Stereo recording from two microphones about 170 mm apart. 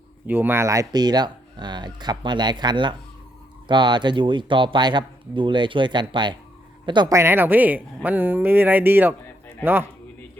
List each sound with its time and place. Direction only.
0.3 s speech: 10° right (ahead or behind)